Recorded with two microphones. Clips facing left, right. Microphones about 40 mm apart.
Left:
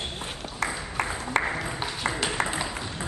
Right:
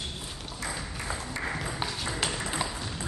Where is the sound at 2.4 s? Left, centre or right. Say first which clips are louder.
Left 7 dB; left.